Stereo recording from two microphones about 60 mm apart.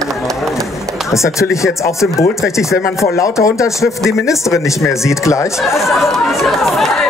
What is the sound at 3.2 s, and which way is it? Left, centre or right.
Speech, left.